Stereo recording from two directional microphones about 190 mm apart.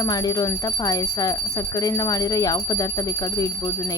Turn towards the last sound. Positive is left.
turn(degrees=20)  # may be behind; listen again after turning